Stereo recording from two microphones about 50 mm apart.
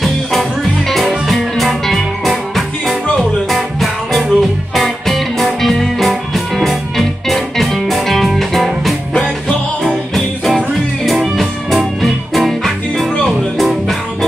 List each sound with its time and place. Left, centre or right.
0.0 s music: centre
10.1 s music: centre